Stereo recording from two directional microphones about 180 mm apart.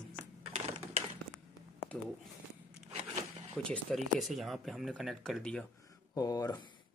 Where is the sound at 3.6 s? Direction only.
5° left (ahead or behind).